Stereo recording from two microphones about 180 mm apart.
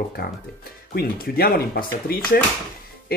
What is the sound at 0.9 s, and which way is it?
Speech, 55° left (ahead or behind).